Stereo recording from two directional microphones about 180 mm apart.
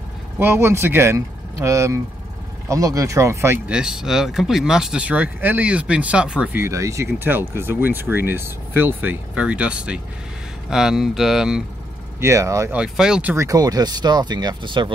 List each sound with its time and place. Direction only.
0.4 s speech: 15° right (ahead or behind)
12.2 s speech: 15° right (ahead or behind)
12.7 s speech: 5° right (ahead or behind); by 14.9 s 25° right (ahead or behind)